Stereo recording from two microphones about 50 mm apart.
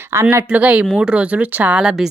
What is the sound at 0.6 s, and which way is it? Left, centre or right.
Speech, right.